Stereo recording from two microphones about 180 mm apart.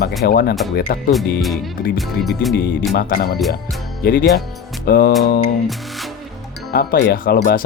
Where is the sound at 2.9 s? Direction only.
55° left (ahead or behind).